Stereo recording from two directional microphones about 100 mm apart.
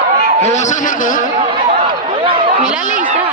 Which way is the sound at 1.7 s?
85° right.